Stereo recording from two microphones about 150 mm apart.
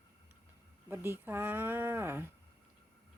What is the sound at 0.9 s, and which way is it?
Speech, 15° right (ahead or behind).